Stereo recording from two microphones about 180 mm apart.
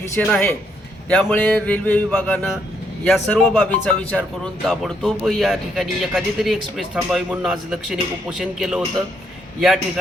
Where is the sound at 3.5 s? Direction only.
5° left (ahead or behind).